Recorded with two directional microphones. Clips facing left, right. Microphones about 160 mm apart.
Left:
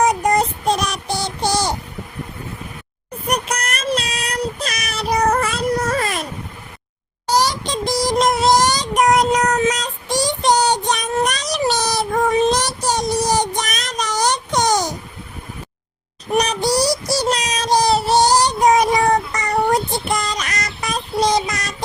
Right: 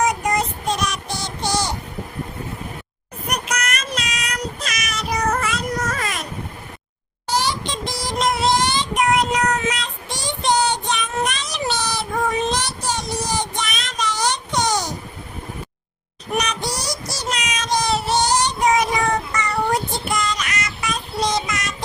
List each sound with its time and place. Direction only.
0.0 s child singing: 35° left (ahead or behind)
3.2 s child singing: 30° left (ahead or behind)
7.3 s child singing: 40° left (ahead or behind)
16.4 s child singing: 35° left (ahead or behind)